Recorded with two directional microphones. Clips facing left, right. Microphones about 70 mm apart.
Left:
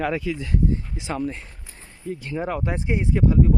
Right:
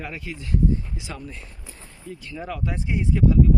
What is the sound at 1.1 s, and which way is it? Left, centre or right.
Speech, left.